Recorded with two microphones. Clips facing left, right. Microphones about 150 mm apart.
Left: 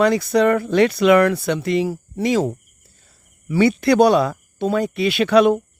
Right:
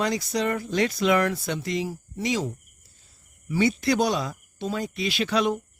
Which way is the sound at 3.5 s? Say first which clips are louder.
Left 7 dB; 65° left (ahead or behind).